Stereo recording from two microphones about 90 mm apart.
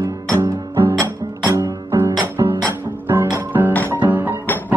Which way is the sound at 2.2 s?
25° right (ahead or behind).